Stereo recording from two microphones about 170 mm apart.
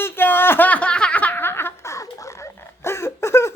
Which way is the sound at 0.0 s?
10° left (ahead or behind).